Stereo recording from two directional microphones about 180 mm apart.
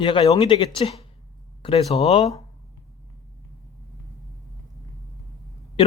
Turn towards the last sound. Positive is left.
turn(degrees=30)  # may be behind; listen again after turning